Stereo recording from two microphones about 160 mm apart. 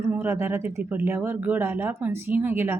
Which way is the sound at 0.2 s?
15° right (ahead or behind).